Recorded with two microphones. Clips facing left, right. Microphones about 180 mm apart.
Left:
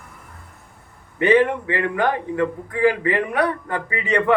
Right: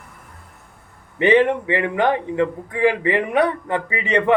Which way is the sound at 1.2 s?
20° right (ahead or behind).